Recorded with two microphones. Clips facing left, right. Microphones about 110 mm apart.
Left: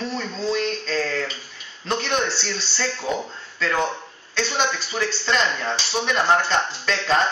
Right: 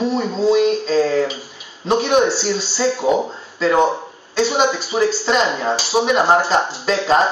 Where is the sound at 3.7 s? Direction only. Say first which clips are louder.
Right 8 dB; 30° right (ahead or behind).